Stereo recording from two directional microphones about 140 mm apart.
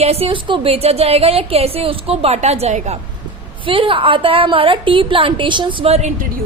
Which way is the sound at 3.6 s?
40° right (ahead or behind).